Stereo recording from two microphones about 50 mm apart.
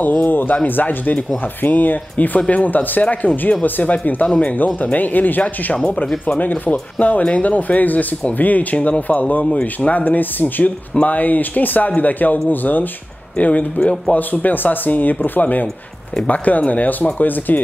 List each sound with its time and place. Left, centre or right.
0.0 s speech: left
14.1 s speech: left